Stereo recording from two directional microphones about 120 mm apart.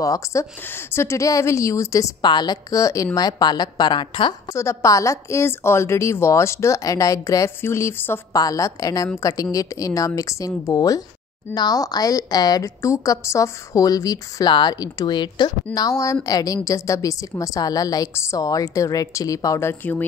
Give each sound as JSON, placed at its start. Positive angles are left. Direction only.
{"t": 0.0, "sound": "a woman's voice", "side_deg": 25}
{"t": 4.6, "sound": "a woman's voice", "side_deg": 25}